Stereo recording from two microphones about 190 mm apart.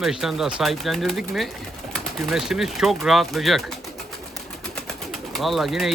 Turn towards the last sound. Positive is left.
turn(degrees=0)  # may be behind; listen again after turning